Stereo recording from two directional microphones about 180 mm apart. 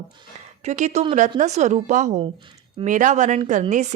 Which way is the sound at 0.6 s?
40° right (ahead or behind).